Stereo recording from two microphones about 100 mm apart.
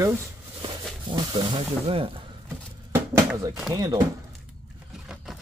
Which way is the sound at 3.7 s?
40° right (ahead or behind).